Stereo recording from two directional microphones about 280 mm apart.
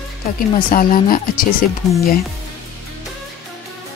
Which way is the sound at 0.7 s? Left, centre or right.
Left.